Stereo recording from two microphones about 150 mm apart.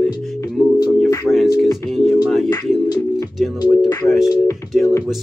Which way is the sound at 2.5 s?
25° left (ahead or behind).